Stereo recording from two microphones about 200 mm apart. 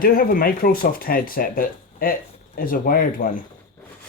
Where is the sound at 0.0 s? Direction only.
45° left (ahead or behind).